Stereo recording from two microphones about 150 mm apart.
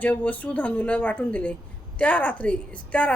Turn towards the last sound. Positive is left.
turn(degrees=10)  # may be behind; listen again after turning